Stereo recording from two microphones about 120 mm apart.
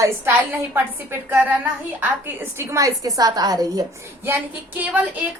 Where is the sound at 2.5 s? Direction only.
25° right (ahead or behind).